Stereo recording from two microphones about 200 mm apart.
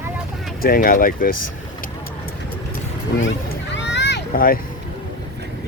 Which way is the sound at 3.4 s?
60° left (ahead or behind).